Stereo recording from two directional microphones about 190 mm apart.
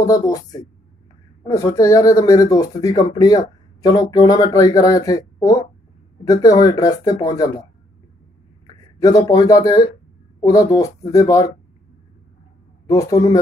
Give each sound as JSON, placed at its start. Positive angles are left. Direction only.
{"t": 0.0, "sound": "speech", "side_deg": 20}
{"t": 9.0, "sound": "speech", "side_deg": 20}
{"t": 12.8, "sound": "speech", "side_deg": 20}